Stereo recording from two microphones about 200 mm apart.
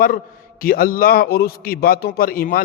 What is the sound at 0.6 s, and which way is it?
A man's voice, 45° left (ahead or behind).